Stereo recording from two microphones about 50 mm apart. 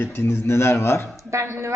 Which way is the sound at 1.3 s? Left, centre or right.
Right.